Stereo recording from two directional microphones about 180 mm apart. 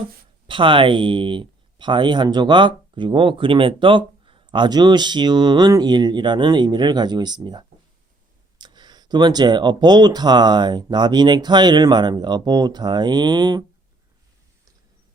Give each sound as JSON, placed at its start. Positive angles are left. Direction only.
{"t": 0.4, "sound": "speech", "side_deg": -30}